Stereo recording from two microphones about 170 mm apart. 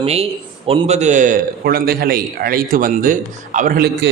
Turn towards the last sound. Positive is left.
turn(degrees=-60)  # may be behind; listen again after turning